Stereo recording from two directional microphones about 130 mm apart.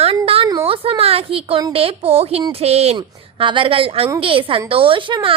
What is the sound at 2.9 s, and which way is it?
A woman's voice, 40° right (ahead or behind).